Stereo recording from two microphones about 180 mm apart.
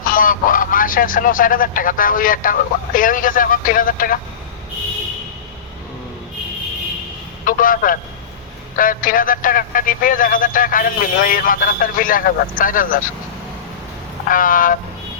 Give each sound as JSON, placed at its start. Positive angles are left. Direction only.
{"t": 0.1, "sound": "speech", "side_deg": 50}
{"t": 7.4, "sound": "speech", "side_deg": 50}
{"t": 14.3, "sound": "speech", "side_deg": 50}